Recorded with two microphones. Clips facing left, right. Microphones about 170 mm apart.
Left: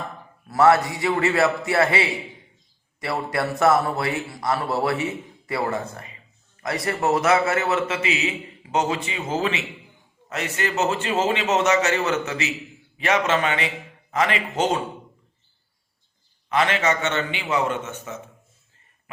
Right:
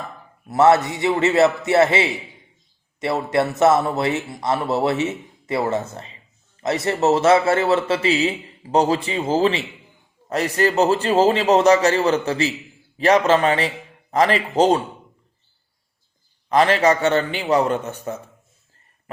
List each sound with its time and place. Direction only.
0.4 s a man's voice: 20° right (ahead or behind)
16.5 s a man's voice: 35° right (ahead or behind)